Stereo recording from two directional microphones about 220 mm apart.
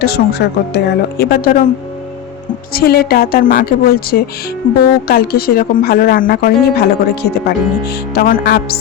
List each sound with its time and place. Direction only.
0.0 s speech: 50° left (ahead or behind)
2.7 s speech: 45° left (ahead or behind)